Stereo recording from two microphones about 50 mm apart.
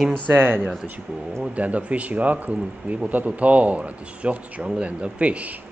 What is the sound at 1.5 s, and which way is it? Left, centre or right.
Speech, right.